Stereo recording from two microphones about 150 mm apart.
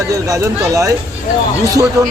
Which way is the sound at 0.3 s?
20° right (ahead or behind).